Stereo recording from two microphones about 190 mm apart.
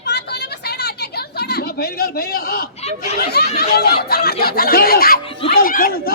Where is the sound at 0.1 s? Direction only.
65° left (ahead or behind).